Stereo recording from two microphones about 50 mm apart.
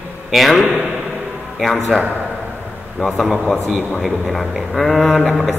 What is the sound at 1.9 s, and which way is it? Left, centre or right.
A man's voice, centre.